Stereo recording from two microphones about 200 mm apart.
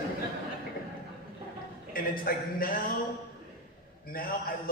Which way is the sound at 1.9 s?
45° left (ahead or behind).